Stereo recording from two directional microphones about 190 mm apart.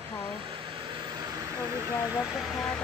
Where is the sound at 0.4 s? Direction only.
25° right (ahead or behind).